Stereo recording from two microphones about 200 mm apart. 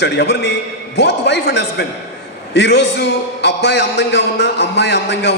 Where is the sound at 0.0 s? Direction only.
60° left (ahead or behind).